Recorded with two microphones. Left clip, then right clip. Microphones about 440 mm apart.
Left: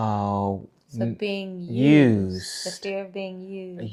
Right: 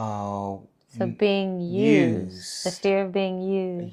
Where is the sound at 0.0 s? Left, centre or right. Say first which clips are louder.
Left 4 dB; left.